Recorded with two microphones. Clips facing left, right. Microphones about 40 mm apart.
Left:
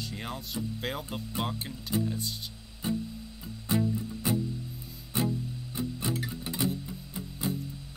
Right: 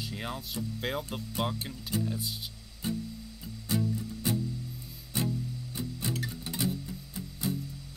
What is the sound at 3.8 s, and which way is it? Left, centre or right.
Music, centre.